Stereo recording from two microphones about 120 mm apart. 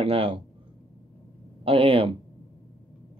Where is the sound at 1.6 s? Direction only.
50° right (ahead or behind).